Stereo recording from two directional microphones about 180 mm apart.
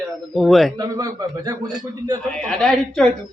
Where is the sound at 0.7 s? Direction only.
20° right (ahead or behind).